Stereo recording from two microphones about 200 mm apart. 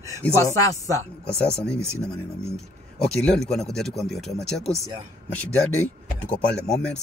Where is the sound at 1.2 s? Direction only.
5° left (ahead or behind).